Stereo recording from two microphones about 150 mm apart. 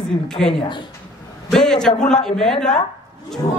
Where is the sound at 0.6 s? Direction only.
30° left (ahead or behind).